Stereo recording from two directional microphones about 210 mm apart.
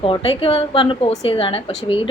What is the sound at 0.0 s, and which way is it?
A woman's voice, 25° left (ahead or behind).